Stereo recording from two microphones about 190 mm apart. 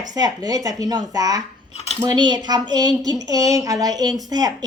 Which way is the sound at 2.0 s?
20° right (ahead or behind).